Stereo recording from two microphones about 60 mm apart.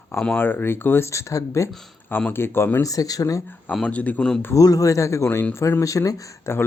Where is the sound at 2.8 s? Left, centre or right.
Left.